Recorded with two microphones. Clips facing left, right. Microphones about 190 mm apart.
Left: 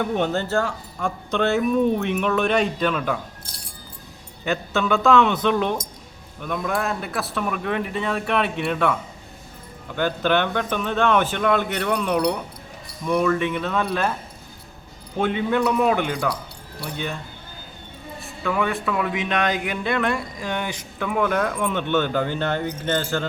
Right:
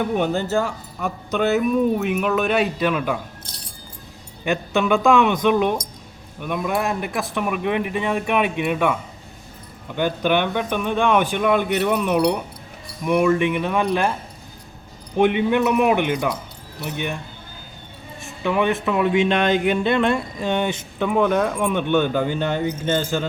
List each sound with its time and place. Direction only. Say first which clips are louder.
0.0 s speech: right 1 dB; 10° right (ahead or behind)
4.4 s speech: right 3 dB; 15° right (ahead or behind)
15.1 s speech: right 4 dB; 15° right (ahead or behind)
18.2 s speech: right 3 dB; 20° right (ahead or behind)